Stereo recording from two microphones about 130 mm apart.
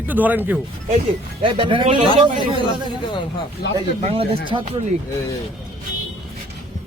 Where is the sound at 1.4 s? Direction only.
40° right (ahead or behind).